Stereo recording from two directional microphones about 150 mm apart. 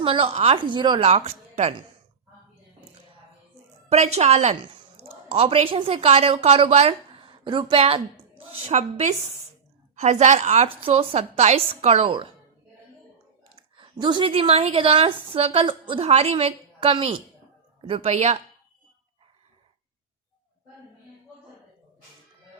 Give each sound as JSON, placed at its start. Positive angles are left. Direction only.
{"t": 0.0, "sound": "a woman's voice", "side_deg": -35}
{"t": 1.0, "sound": "speech", "side_deg": -45}
{"t": 3.8, "sound": "a woman's voice", "side_deg": -45}
{"t": 13.4, "sound": "a sound", "side_deg": -30}
{"t": 14.0, "sound": "a woman's voice", "side_deg": -30}